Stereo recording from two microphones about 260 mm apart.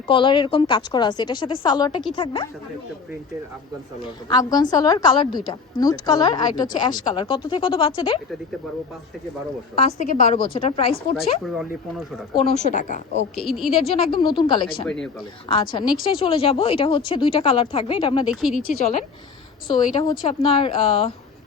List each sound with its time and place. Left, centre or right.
0.1 s a woman's voice: centre
4.0 s speech: centre
9.7 s a woman's voice: left
11.4 s speech: centre
12.4 s a woman's voice: left
13.3 s speech: centre
13.8 s a woman's voice: left
14.8 s speech: centre
15.4 s a woman's voice: centre
18.3 s speech: centre
19.6 s a woman's voice: centre